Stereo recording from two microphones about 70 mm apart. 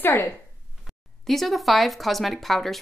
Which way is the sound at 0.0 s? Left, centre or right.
Left.